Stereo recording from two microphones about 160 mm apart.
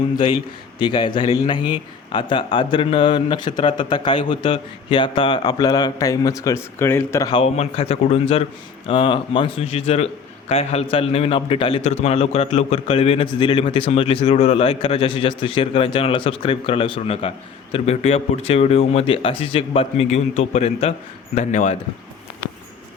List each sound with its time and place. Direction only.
0.8 s a man's voice: 30° left (ahead or behind)
7.3 s a man's voice: 40° left (ahead or behind)
21.3 s speech: 50° left (ahead or behind)